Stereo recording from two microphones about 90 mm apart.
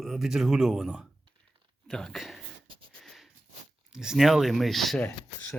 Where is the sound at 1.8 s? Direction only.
5° left (ahead or behind).